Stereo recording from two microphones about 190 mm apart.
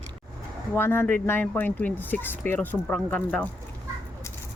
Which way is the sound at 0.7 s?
10° left (ahead or behind).